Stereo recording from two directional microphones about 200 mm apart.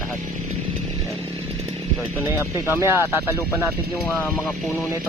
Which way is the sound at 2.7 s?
10° right (ahead or behind).